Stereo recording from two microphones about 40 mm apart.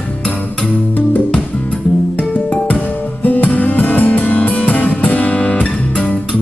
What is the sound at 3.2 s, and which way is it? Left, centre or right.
Music, left.